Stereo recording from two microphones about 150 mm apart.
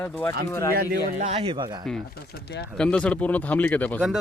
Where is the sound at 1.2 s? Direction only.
45° right (ahead or behind).